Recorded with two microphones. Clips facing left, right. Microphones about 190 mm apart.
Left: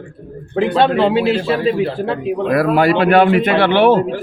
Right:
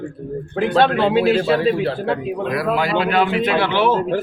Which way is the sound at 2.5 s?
55° left (ahead or behind).